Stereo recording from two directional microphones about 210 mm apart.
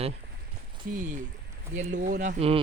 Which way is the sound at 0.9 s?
40° right (ahead or behind).